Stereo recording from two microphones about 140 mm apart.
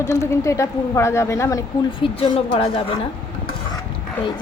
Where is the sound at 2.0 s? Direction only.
40° left (ahead or behind).